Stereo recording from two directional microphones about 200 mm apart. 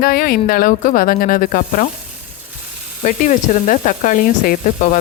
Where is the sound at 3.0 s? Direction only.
40° left (ahead or behind).